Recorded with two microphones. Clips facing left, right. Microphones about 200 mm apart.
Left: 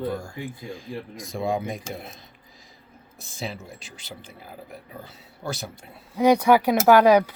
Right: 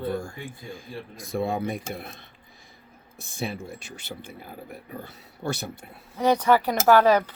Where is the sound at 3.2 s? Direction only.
55° right (ahead or behind).